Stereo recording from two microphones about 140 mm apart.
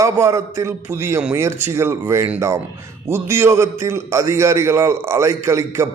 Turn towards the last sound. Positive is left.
turn(degrees=-20)  # may be behind; listen again after turning